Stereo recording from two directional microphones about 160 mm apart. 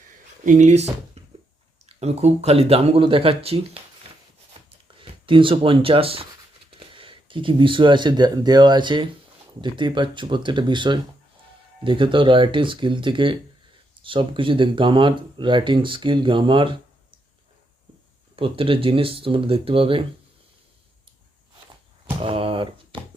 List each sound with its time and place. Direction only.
0.4 s speech: 50° right (ahead or behind)
4.9 s speech: 30° right (ahead or behind)
18.3 s speech: 35° right (ahead or behind)
22.2 s a sound: 35° right (ahead or behind)